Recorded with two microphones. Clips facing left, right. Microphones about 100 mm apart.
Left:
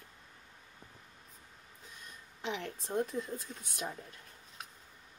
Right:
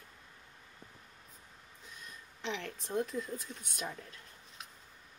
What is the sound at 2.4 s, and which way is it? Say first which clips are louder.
Speech: left 1 dB; 20° left (ahead or behind).